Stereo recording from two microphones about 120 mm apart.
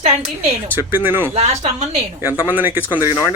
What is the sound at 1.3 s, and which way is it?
Speech, 65° right (ahead or behind).